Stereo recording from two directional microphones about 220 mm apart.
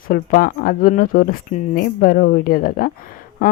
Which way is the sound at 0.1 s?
40° left (ahead or behind).